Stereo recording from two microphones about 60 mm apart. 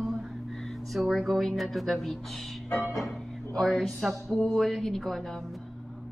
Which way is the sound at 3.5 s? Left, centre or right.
Centre.